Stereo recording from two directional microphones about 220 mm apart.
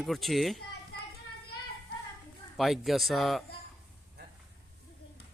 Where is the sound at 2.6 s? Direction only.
Centre (ahead or behind).